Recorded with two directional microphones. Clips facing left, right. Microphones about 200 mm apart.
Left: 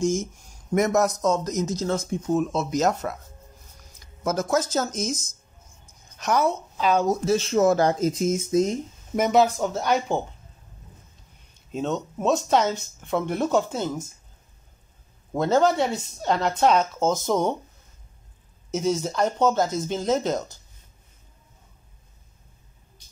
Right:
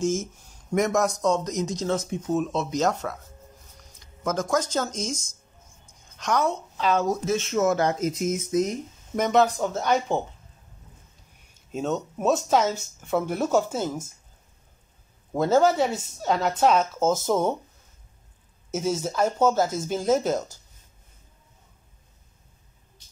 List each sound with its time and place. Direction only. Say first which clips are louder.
0.0 s speech: left 1 dB; 15° left (ahead or behind)
0.8 s speech: left 1 dB; 5° left (ahead or behind)
4.2 s speech: left 1 dB; 5° left (ahead or behind)
6.8 s speech: left 2 dB; 15° left (ahead or behind)
7.2 s speech: left 5 dB; 35° left (ahead or behind)
9.1 s speech: left 1 dB; 5° left (ahead or behind)
11.7 s speech: even; 5° right (ahead or behind)
15.3 s speech: even; 5° right (ahead or behind)
18.7 s speech: left 2 dB; 5° right (ahead or behind)